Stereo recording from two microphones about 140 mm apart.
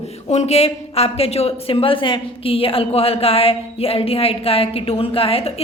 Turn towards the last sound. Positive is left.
turn(degrees=45)  # may be behind; listen again after turning